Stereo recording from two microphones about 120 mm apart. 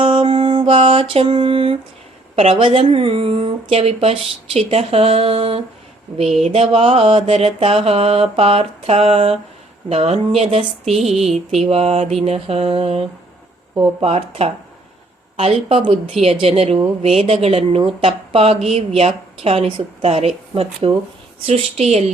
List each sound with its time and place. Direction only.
0.0 s mantra: 50° right (ahead or behind)
2.3 s speech: 55° right (ahead or behind)
6.4 s mantra: 55° right (ahead or behind)
10.9 s a sound: centre (ahead or behind)
11.5 s mantra: 60° right (ahead or behind)
20.5 s speech: 55° right (ahead or behind)
21.4 s mantra: 60° right (ahead or behind)